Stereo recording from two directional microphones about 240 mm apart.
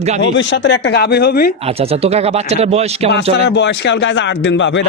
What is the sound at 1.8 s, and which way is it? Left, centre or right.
Speech, right.